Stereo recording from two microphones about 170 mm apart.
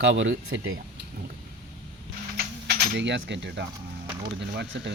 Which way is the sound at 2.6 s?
90° right.